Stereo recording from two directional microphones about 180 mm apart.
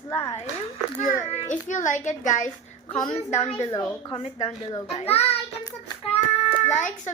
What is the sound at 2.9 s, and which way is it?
Speech, 30° left (ahead or behind).